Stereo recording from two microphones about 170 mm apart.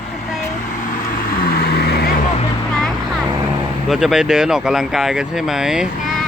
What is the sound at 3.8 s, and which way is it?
Speech, 5° right (ahead or behind).